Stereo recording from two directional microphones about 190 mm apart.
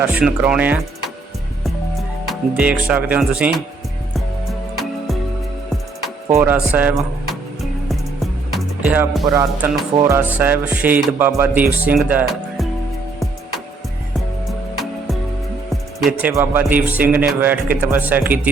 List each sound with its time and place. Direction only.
0.0 s speech: 5° right (ahead or behind)
2.2 s speech: 5° right (ahead or behind)
6.2 s speech: 15° right (ahead or behind)
8.5 s music: 10° right (ahead or behind)
9.2 s speech: 20° right (ahead or behind)
9.6 s speech: 5° right (ahead or behind)
15.7 s music: centre (ahead or behind)
16.3 s speech: 10° right (ahead or behind)